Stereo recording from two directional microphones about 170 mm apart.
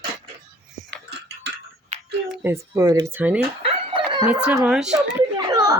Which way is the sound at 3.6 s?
30° right (ahead or behind).